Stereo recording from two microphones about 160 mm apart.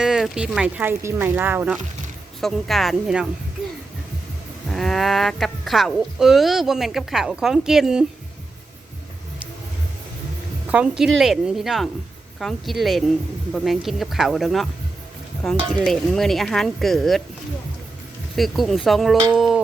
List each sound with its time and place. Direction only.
0.0 s speech: 5° right (ahead or behind)
2.4 s speech: centre (ahead or behind)
4.7 s speech: centre (ahead or behind)
10.7 s speech: 10° right (ahead or behind)
18.3 s speech: centre (ahead or behind)